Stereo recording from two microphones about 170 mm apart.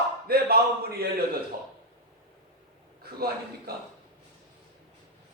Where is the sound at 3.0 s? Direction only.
65° right (ahead or behind).